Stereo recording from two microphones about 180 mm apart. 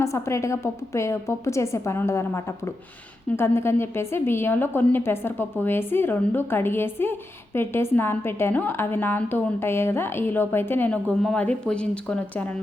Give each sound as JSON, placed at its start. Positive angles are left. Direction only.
{"t": 0.0, "sound": "a woman's voice", "side_deg": 15}